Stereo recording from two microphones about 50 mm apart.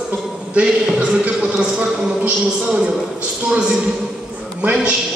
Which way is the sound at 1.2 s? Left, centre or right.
Right.